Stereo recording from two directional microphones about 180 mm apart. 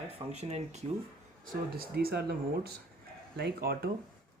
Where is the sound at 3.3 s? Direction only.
60° right (ahead or behind).